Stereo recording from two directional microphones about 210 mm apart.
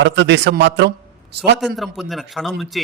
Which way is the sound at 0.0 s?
55° right (ahead or behind).